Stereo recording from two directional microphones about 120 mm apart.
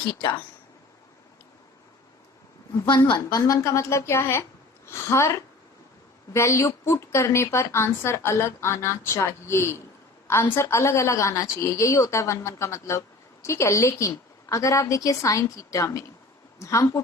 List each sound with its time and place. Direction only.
3.2 s a woman's voice: 30° left (ahead or behind)